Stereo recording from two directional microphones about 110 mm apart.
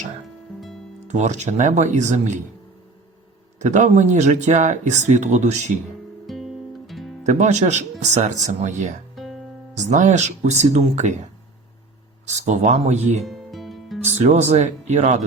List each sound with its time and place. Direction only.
1.0 s speech: 90° right
3.6 s speech: 90° right
6.2 s music: centre (ahead or behind)
7.3 s speech: 90° right
9.1 s music: centre (ahead or behind)
9.7 s speech: 90° right
12.2 s speech: 90° right
13.2 s music: centre (ahead or behind)
14.0 s speech: 90° right